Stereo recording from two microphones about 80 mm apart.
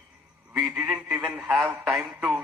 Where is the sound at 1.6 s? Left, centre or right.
Centre.